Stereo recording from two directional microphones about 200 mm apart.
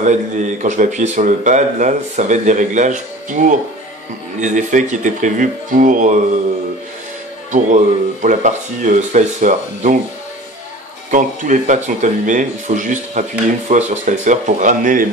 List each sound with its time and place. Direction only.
0.0 s speech: 35° right (ahead or behind)
7.5 s speech: 35° right (ahead or behind)
11.1 s speech: 40° right (ahead or behind)